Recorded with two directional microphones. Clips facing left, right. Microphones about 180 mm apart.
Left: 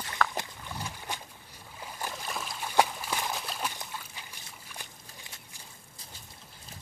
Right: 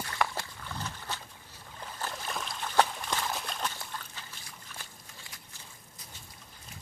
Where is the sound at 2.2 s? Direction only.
5° left (ahead or behind).